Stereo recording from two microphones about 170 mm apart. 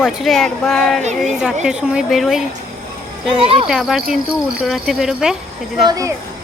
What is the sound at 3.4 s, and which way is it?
Speech, 35° right (ahead or behind).